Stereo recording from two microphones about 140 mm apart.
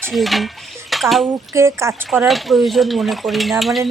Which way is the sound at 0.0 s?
Centre (ahead or behind).